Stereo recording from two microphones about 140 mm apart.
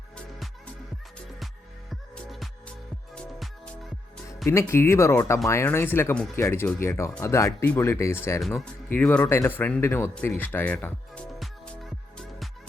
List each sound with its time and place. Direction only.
0.3 s music: centre (ahead or behind)
1.9 s music: centre (ahead or behind)
4.4 s speech: 20° left (ahead or behind)
11.3 s music: 5° left (ahead or behind)